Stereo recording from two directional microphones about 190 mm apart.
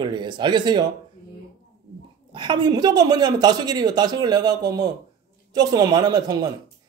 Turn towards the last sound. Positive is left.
turn(degrees=-20)  # may be behind; listen again after turning